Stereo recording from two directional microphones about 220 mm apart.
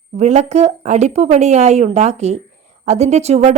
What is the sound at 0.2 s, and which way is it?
A woman's voice, 30° right (ahead or behind).